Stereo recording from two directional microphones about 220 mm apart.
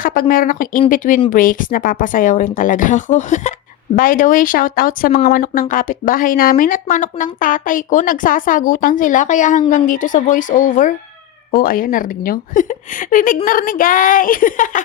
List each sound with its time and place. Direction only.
0.0 s speech: 40° left (ahead or behind)